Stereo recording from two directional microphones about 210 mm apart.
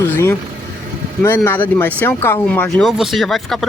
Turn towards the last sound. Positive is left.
turn(degrees=0)  # may be behind; listen again after turning